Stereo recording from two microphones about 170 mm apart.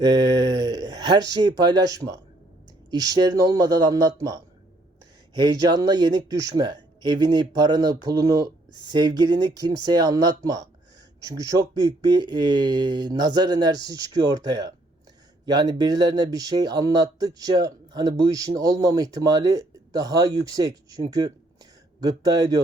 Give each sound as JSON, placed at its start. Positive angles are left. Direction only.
{"t": 0.0, "sound": "speech", "side_deg": -25}